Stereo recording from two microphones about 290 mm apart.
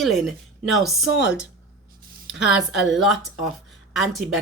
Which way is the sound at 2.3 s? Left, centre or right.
Left.